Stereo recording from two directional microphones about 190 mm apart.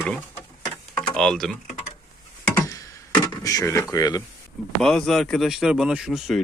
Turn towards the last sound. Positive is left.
turn(degrees=0)  # may be behind; listen again after turning